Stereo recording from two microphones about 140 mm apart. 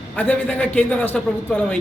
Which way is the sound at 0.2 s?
10° left (ahead or behind).